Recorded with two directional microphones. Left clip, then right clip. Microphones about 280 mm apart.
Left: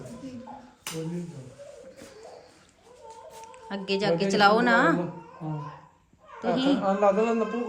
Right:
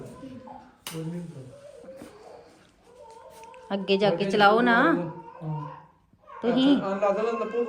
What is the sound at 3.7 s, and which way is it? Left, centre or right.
A woman's voice, centre.